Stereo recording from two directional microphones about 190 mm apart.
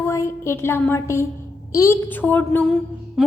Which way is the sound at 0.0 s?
15° left (ahead or behind).